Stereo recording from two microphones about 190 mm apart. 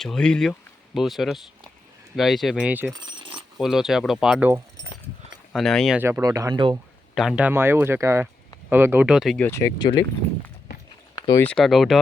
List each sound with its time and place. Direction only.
0.0 s speech: 5° left (ahead or behind)
2.9 s coin: 25° right (ahead or behind)
3.6 s speech: centre (ahead or behind)
5.5 s speech: centre (ahead or behind)
6.0 s speech: 10° right (ahead or behind)
7.2 s speech: 5° right (ahead or behind)
9.5 s speech: 15° left (ahead or behind)
11.1 s a sound: 20° left (ahead or behind)
11.4 s speech: centre (ahead or behind)